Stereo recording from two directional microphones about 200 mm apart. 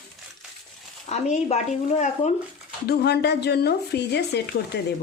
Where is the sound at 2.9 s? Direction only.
55° left (ahead or behind).